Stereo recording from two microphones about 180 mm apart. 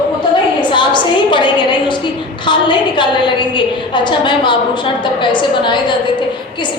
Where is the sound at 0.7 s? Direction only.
25° left (ahead or behind).